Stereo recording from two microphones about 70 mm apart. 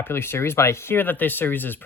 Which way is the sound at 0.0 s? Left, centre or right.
Left.